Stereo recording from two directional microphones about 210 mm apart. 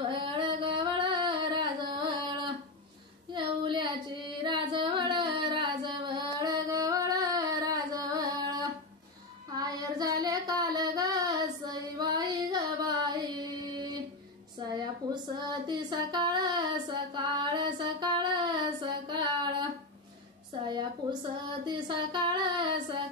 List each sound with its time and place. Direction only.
0.0 s singing: 20° right (ahead or behind)
3.3 s carnatic music: 20° right (ahead or behind)
9.5 s child singing: 20° right (ahead or behind)
14.6 s a sound: 20° right (ahead or behind)
15.6 s female singing: 20° right (ahead or behind)
20.6 s a sound: 20° right (ahead or behind)